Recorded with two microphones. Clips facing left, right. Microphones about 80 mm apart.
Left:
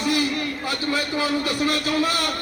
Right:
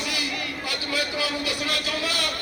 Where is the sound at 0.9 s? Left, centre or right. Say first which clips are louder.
Left 3 dB; left.